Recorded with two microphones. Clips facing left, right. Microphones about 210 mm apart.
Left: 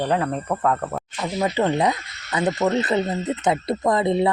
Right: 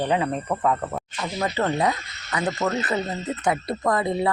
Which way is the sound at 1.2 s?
15° left (ahead or behind).